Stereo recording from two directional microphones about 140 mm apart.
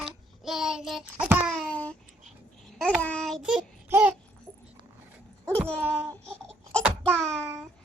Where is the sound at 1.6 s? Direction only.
10° left (ahead or behind).